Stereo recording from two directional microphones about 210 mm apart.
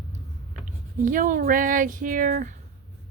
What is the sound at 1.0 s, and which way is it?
Speech, 40° right (ahead or behind).